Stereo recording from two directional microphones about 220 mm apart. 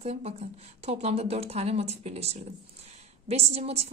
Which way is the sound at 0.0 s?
30° right (ahead or behind).